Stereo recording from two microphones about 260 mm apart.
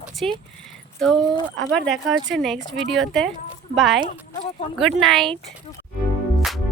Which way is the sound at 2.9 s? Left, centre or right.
Centre.